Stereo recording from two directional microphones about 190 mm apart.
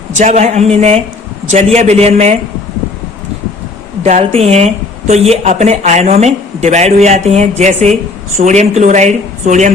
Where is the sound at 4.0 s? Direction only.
35° right (ahead or behind).